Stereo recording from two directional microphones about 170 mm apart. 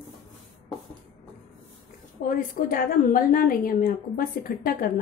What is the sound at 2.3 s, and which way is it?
A woman's voice, 55° left (ahead or behind).